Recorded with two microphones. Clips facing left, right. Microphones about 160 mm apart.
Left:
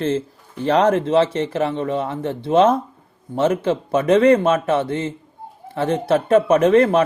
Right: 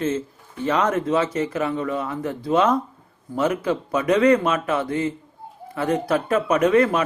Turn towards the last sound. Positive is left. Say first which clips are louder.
# left 4 dB
turn(degrees=30)  # may be behind; listen again after turning